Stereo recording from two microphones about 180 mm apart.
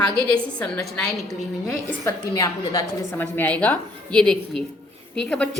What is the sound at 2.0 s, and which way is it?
Speech, 20° left (ahead or behind).